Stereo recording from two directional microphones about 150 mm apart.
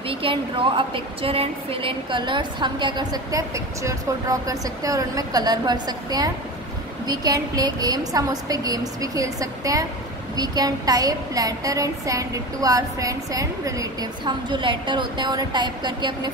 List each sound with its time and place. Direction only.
0.1 s a woman's voice: 35° right (ahead or behind)